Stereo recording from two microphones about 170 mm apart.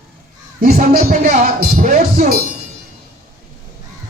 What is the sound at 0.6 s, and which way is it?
Speech, 55° right (ahead or behind).